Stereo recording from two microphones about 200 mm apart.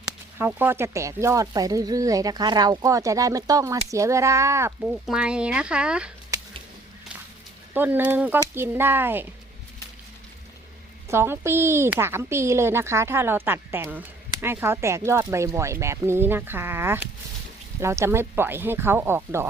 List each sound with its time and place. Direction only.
0.3 s speech: 10° right (ahead or behind)
6.3 s a sound: 15° right (ahead or behind)
7.7 s speech: 10° right (ahead or behind)
11.1 s speech: 10° right (ahead or behind)